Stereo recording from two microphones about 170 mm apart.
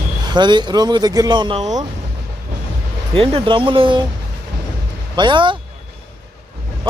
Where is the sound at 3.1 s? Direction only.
30° right (ahead or behind).